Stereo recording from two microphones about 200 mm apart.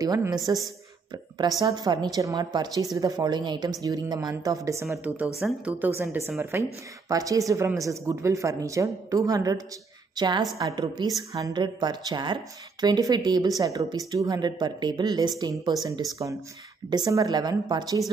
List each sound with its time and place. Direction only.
0.0 s a woman's voice: 20° right (ahead or behind)